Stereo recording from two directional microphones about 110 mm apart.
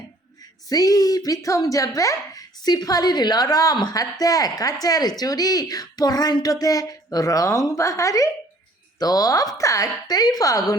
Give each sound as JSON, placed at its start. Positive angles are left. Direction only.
{"t": 0.7, "sound": "a child's voice", "side_deg": 35}